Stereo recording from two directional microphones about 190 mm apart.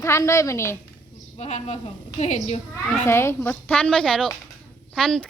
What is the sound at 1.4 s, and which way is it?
A woman's voice, 35° left (ahead or behind).